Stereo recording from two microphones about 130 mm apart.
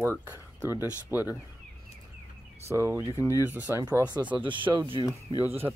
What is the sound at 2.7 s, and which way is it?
Speech, 25° right (ahead or behind).